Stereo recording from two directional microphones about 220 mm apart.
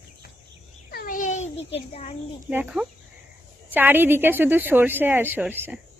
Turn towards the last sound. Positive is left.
turn(degrees=-10)  # may be behind; listen again after turning